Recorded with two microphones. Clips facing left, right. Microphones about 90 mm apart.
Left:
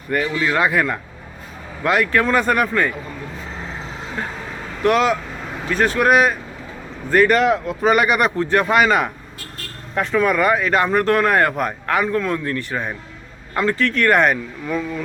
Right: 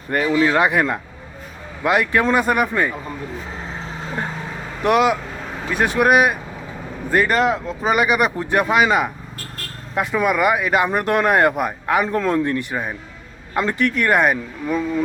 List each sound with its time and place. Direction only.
0.1 s speech: 30° right (ahead or behind); by 2.9 s 10° right (ahead or behind)
4.8 s speech: 15° right (ahead or behind)
8.4 s speech: 15° right (ahead or behind)
8.6 s speech: 5° right (ahead or behind)
12.0 s speech: 30° right (ahead or behind)
12.5 s speech: 15° right (ahead or behind)